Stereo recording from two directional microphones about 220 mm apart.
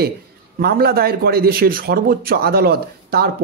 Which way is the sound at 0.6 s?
45° right (ahead or behind).